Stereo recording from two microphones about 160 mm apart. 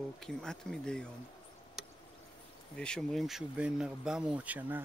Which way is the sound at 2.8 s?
5° left (ahead or behind).